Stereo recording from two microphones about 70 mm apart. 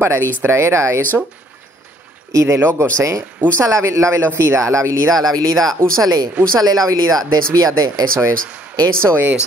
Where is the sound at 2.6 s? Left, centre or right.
Right.